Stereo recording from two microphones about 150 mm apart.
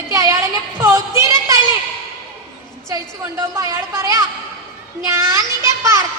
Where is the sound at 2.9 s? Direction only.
20° right (ahead or behind).